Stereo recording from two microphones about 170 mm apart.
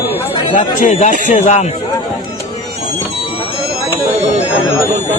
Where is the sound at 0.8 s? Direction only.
50° left (ahead or behind).